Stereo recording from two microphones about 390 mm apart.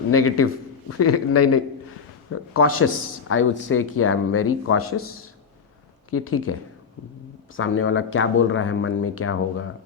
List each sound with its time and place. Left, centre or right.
0.1 s speech: left
6.1 s speech: left